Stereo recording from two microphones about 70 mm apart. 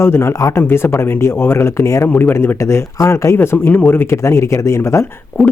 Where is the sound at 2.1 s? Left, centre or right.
Left.